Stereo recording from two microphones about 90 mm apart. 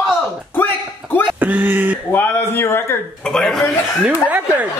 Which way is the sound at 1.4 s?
20° right (ahead or behind).